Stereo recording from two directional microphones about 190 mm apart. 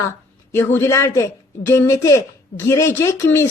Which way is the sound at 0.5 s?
15° left (ahead or behind).